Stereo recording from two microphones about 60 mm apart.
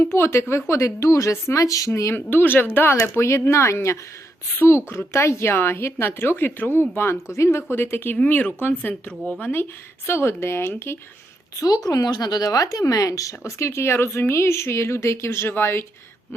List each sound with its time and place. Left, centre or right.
0.0 s speech: left
2.1 s speech: left
3.1 s speech: left
7.3 s speech: left
9.4 s speech: left
11.6 s speech: left